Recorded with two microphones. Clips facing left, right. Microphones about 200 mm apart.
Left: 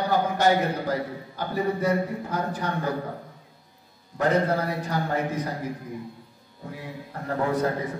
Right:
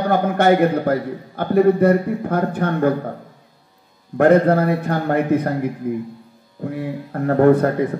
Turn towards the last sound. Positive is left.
turn(degrees=-60)  # may be behind; listen again after turning